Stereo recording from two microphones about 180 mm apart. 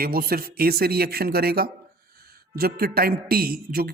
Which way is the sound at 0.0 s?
55° right (ahead or behind).